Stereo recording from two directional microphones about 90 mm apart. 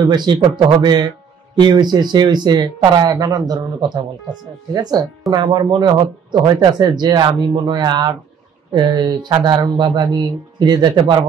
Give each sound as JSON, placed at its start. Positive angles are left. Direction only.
{"t": 0.0, "sound": "a man's voice", "side_deg": -55}